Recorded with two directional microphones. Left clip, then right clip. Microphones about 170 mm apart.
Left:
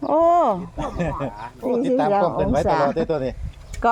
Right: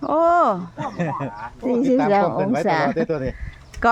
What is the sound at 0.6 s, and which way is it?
Speech, 25° right (ahead or behind).